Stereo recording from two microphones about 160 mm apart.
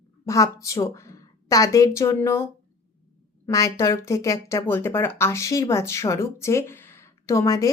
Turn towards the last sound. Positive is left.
turn(degrees=20)  # may be behind; listen again after turning